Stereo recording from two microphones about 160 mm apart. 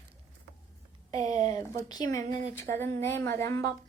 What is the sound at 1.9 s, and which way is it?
A woman's voice, 25° left (ahead or behind).